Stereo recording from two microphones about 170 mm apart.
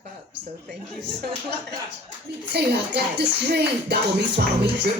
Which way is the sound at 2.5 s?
75° right (ahead or behind).